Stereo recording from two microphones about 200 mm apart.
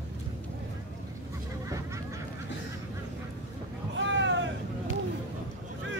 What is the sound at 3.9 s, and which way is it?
Vehicle, 65° right (ahead or behind).